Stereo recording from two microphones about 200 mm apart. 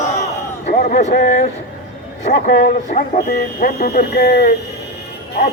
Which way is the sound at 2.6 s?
50° left (ahead or behind).